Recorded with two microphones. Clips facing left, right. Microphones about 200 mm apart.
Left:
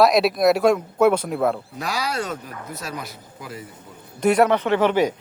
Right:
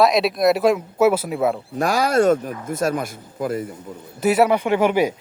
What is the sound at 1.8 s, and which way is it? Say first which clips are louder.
Speech: right 12 dB; 50° right (ahead or behind).